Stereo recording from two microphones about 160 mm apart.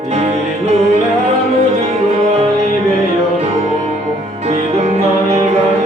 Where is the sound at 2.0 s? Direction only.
45° right (ahead or behind).